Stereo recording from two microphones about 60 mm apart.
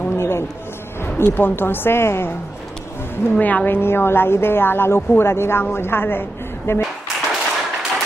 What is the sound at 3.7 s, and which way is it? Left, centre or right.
Speech, left.